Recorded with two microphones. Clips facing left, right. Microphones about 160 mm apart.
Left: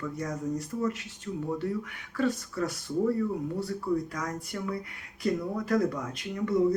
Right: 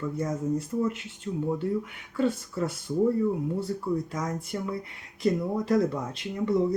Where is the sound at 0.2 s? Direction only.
25° right (ahead or behind).